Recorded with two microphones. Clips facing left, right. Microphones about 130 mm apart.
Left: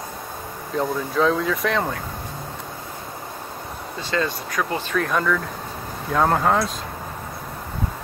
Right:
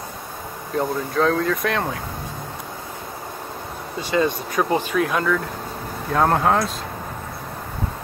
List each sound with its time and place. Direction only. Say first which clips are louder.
0.7 s speech: even; centre (ahead or behind)
4.1 s speech: right 4 dB; 20° right (ahead or behind)
4.9 s speech: left 3 dB; 5° right (ahead or behind)